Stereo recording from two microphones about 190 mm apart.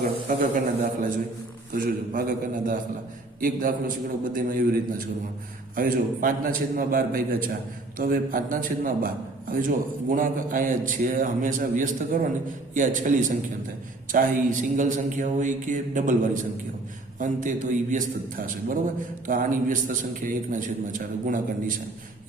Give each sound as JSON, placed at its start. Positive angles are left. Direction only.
{"t": 0.3, "sound": "a man's voice", "side_deg": -45}
{"t": 3.4, "sound": "a man's voice", "side_deg": -45}